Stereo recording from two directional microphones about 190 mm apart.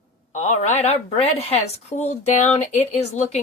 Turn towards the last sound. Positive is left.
turn(degrees=35)  # may be behind; listen again after turning